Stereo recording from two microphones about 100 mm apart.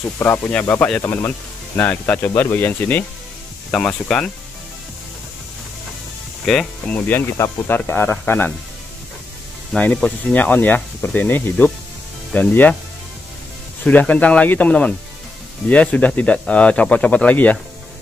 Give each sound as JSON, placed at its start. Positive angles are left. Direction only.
{"t": 0.2, "sound": "speech", "side_deg": 20}
{"t": 6.4, "sound": "speech", "side_deg": 5}
{"t": 7.0, "sound": "speech", "side_deg": 25}
{"t": 9.8, "sound": "speech", "side_deg": 10}
{"t": 13.8, "sound": "speech", "side_deg": 15}